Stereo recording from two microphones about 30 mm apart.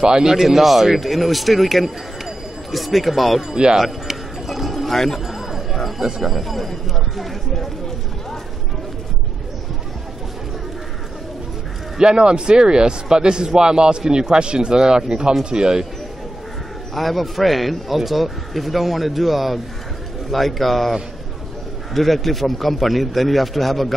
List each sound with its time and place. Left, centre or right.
0.0 s a man's voice: right
0.3 s a man's voice: centre
3.6 s a man's voice: right
4.5 s bird: centre
5.2 s music: centre
6.2 s a man's voice: centre
12.0 s a man's voice: right
16.9 s a man's voice: centre
21.9 s a man's voice: centre